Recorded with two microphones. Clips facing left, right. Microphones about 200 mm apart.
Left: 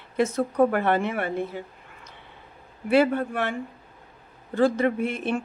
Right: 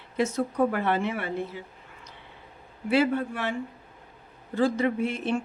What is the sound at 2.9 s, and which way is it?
Speech, 55° left (ahead or behind).